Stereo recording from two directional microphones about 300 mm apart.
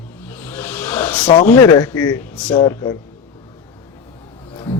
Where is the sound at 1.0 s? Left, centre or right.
Centre.